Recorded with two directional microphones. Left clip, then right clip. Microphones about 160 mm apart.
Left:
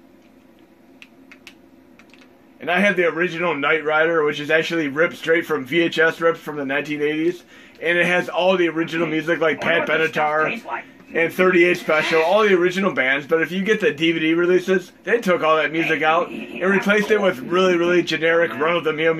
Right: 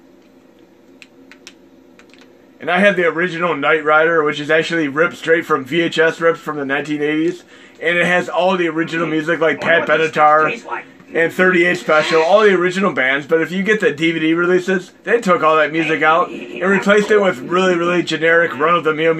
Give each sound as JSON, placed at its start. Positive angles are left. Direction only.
{"t": 2.6, "sound": "a man's voice", "side_deg": -50}